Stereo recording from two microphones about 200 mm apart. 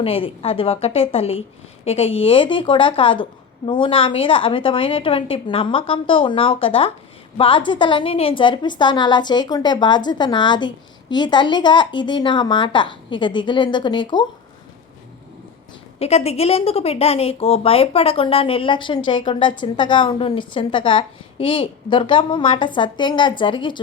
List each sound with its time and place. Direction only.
0.0 s a woman's voice: 30° left (ahead or behind)
16.0 s a woman's voice: 30° left (ahead or behind)